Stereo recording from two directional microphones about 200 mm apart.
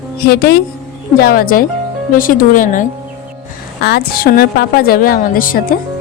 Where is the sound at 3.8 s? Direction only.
50° left (ahead or behind).